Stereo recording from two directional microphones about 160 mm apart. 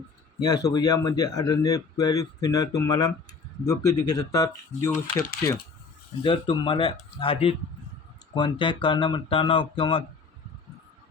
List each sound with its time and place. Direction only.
0.3 s speech: 25° left (ahead or behind)
6.2 s speech: 30° left (ahead or behind)